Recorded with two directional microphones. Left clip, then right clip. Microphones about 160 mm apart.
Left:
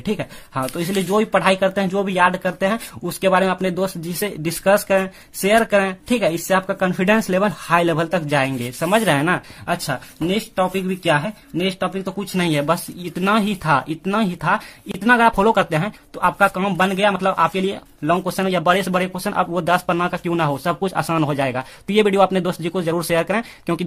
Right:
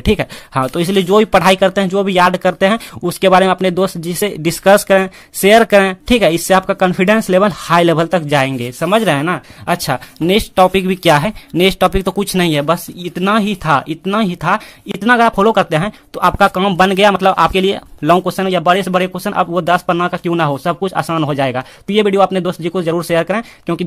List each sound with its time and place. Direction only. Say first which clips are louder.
0.0 s speech: right 10 dB; 35° right (ahead or behind)
9.7 s speech: right 7 dB; 40° right (ahead or behind)
12.4 s speech: right 3 dB; 25° right (ahead or behind)
18.2 s speech: right 5 dB; 20° right (ahead or behind)